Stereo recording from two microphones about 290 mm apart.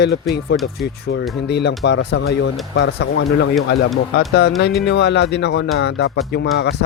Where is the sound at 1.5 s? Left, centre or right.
Left.